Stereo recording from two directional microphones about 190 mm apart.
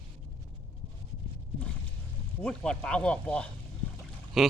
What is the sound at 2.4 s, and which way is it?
Speech, 5° left (ahead or behind).